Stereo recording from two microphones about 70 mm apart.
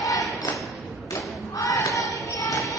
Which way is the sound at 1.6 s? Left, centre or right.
Left.